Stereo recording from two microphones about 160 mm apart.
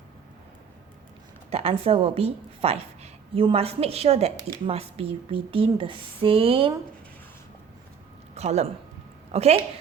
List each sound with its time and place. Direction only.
1.5 s a woman's voice: 40° right (ahead or behind)
8.4 s speech: 40° right (ahead or behind)